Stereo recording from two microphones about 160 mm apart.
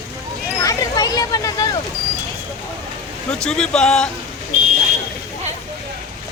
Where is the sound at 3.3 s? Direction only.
5° left (ahead or behind).